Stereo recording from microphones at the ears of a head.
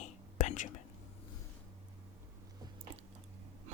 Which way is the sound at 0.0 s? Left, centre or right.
Left.